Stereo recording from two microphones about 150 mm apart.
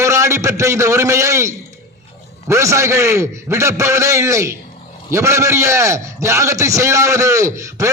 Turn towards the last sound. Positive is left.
turn(degrees=-20)  # may be behind; listen again after turning